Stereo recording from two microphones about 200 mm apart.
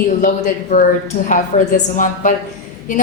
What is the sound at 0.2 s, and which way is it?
A woman's voice, 45° left (ahead or behind).